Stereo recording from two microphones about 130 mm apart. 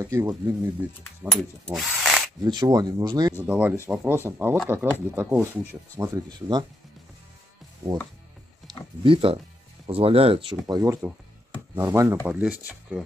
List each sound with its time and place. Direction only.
0.0 s speech: 25° right (ahead or behind)
1.3 s drill: centre (ahead or behind)
2.4 s speech: 30° right (ahead or behind)
3.3 s speech: 10° right (ahead or behind)
9.0 s speech: 45° right (ahead or behind)
10.7 s speech: 25° right (ahead or behind)
12.3 s speech: 10° right (ahead or behind)